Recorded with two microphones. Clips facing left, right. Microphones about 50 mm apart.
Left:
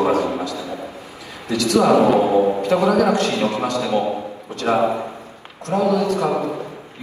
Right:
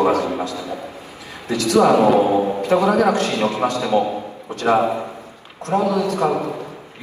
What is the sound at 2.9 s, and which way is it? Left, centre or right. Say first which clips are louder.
Speech: even; right.